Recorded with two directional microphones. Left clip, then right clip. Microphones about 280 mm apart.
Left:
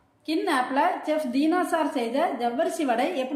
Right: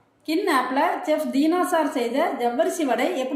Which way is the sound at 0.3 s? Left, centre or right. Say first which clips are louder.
Right 3 dB; left.